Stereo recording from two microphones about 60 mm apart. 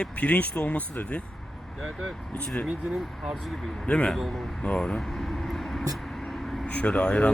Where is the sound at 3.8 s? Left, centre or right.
Centre.